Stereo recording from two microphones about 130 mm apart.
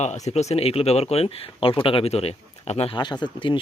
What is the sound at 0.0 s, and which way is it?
Speech, 60° left (ahead or behind).